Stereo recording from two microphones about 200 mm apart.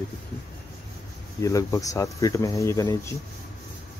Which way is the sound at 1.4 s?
15° left (ahead or behind).